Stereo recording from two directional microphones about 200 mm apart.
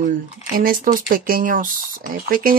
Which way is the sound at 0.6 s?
45° right (ahead or behind).